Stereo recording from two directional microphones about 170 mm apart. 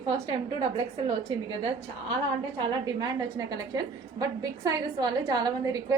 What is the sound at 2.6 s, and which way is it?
A woman's voice, 25° right (ahead or behind).